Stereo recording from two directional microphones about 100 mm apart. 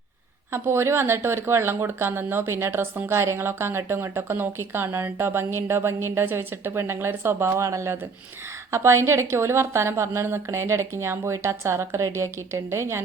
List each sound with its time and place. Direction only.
0.5 s speech: 25° right (ahead or behind)